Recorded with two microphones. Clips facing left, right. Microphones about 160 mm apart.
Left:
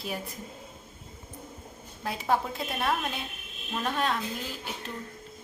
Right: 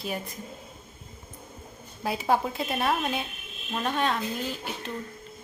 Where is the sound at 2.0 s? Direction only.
5° right (ahead or behind).